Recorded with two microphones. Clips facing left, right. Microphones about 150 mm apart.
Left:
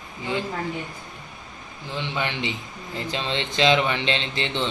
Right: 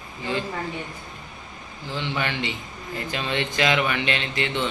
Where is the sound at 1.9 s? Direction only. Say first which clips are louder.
Even; 20° left (ahead or behind).